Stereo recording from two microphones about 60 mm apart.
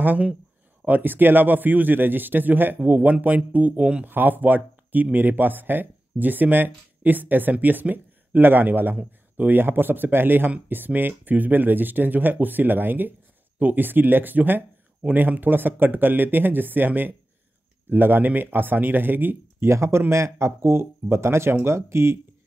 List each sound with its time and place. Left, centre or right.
0.0 s speech: right
19.6 s speech: right